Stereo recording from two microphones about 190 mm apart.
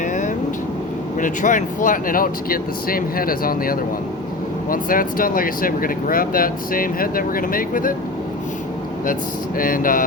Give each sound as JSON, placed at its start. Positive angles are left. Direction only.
{"t": 0.0, "sound": "vehicle", "side_deg": 40}
{"t": 1.2, "sound": "speech", "side_deg": 40}
{"t": 9.6, "sound": "speech", "side_deg": 45}